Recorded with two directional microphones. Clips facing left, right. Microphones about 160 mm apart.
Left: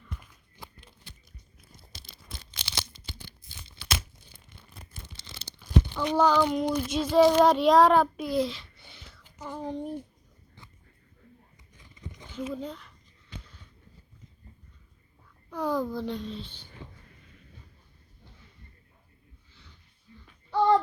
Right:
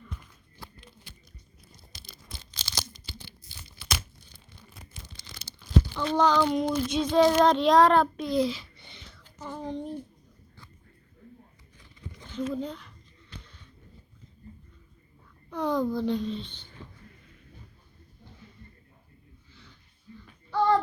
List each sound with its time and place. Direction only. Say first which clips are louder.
0.6 s a sound: even; 20° left (ahead or behind)
1.7 s crunch: left 1 dB; 25° left (ahead or behind)
3.4 s tearing: left 1 dB; 20° left (ahead or behind)
5.1 s tearing: left 1 dB; 25° left (ahead or behind); by 6.7 s centre (ahead or behind)
6.7 s child singing: right 1 dB; 10° left (ahead or behind)
12.3 s speech: right 3 dB; 10° left (ahead or behind)
15.4 s a child's voice: right 2 dB; 5° left (ahead or behind)
20.5 s a sound: left 1 dB; 20° left (ahead or behind)